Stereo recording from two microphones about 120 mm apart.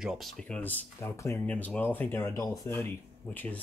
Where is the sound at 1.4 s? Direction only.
10° left (ahead or behind).